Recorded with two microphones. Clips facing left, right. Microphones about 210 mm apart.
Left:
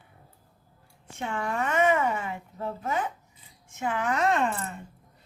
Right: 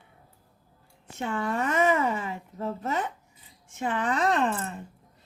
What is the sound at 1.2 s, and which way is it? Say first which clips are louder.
Speech: right 2 dB; 35° right (ahead or behind).